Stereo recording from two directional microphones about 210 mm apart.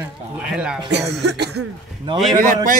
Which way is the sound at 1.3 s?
50° right (ahead or behind).